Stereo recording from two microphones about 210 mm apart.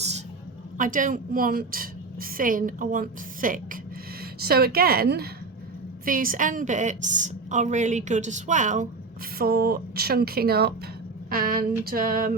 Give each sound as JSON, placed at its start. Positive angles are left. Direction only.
{"t": 0.8, "sound": "a woman's voice", "side_deg": -40}
{"t": 9.4, "sound": "speech", "side_deg": -45}